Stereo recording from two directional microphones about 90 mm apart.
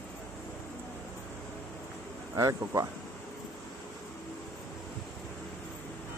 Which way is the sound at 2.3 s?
40° right (ahead or behind).